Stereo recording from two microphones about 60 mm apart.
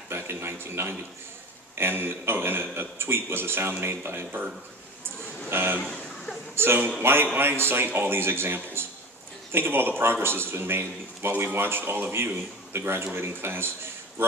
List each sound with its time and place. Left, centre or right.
0.1 s a man's voice: right
5.5 s a man's voice: right